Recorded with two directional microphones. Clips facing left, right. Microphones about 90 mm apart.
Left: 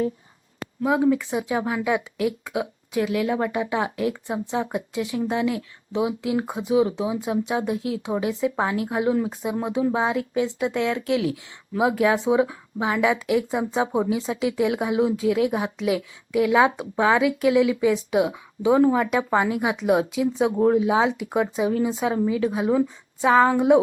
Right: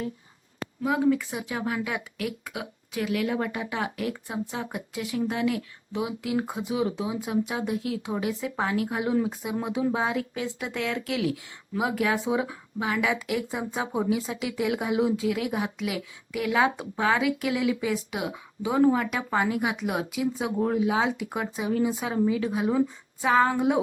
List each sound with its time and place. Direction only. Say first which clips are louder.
0.8 s speech: left 4 dB; 10° left (ahead or behind); by 23.8 s 25° left (ahead or behind)